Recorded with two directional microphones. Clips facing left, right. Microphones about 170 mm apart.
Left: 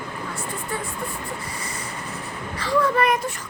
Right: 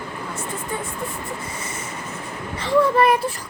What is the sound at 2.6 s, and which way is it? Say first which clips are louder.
Speech: right 4 dB; 25° right (ahead or behind).